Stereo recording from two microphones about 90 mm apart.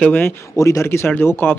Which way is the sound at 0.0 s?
20° left (ahead or behind).